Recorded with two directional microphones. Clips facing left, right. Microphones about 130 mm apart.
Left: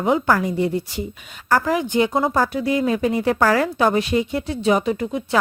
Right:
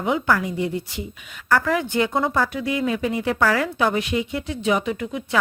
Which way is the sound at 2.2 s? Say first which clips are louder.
Left 3 dB; 35° left (ahead or behind).